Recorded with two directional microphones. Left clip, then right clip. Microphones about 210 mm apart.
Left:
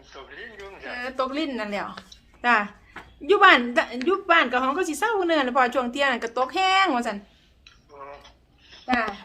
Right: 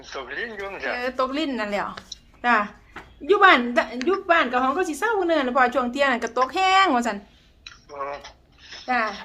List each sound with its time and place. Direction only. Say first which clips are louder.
0.0 s speech: right 10 dB; 50° right (ahead or behind)
0.9 s speech: right 1 dB; 10° right (ahead or behind)
7.6 s a sound: right 10 dB; 50° right (ahead or behind)